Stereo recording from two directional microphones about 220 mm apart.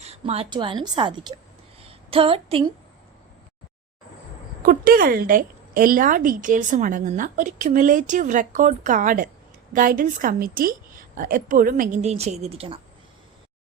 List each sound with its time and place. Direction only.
0.0 s a woman's voice: 30° right (ahead or behind)
1.8 s a sound: 25° right (ahead or behind)
4.6 s a woman's voice: 40° right (ahead or behind); by 12.8 s 25° right (ahead or behind)